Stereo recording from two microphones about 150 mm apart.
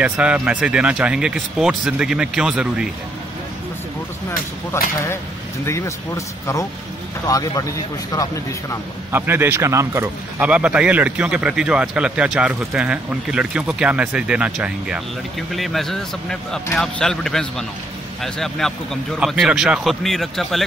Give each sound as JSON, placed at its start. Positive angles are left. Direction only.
{"t": 0.0, "sound": "speech", "side_deg": -10}
{"t": 4.7, "sound": "speech", "side_deg": 15}
{"t": 9.1, "sound": "speech", "side_deg": -15}
{"t": 10.5, "sound": "speech", "side_deg": -5}